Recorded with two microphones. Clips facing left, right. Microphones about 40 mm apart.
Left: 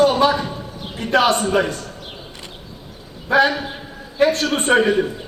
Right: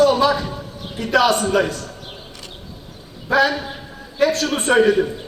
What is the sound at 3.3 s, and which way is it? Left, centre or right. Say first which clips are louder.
A man's voice: left 1 dB; left.